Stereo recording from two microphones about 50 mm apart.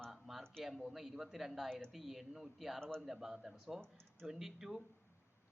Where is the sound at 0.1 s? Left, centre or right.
Centre.